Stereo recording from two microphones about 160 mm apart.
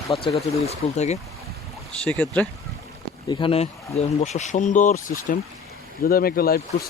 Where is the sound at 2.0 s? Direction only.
10° left (ahead or behind).